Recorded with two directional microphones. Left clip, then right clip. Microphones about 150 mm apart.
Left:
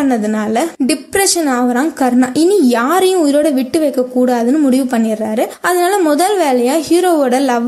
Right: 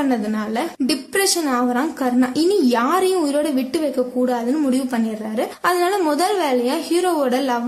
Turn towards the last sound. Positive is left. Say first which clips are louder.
# left 7 dB
turn(degrees=30)  # may be behind; listen again after turning